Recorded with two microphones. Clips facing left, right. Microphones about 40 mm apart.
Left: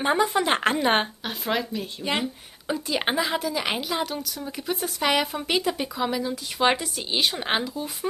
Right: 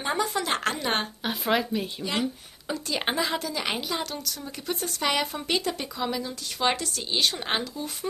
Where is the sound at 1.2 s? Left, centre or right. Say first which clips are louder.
Right 2 dB; centre.